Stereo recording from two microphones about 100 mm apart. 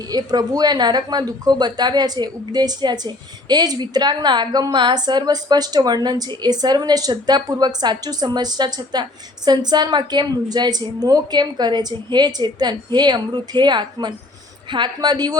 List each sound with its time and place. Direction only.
0.1 s a woman's voice: 40° right (ahead or behind)